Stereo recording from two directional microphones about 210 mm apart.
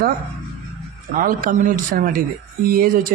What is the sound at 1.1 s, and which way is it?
Speech, 40° right (ahead or behind).